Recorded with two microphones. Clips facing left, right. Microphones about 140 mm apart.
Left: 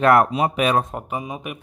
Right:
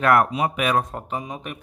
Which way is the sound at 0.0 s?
30° left (ahead or behind).